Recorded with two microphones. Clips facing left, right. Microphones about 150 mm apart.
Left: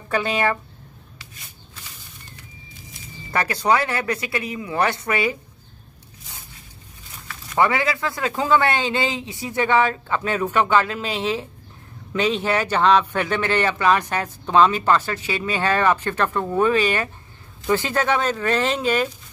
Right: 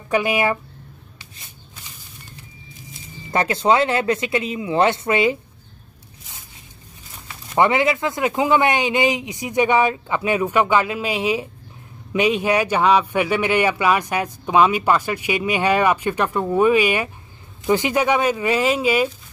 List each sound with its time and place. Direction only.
0.1 s a man's voice: 10° right (ahead or behind)
2.9 s speech: 20° right (ahead or behind)
7.2 s a man's voice: 20° right (ahead or behind)